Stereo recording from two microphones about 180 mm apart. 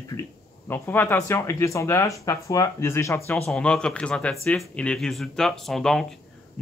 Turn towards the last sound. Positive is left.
turn(degrees=0)  # may be behind; listen again after turning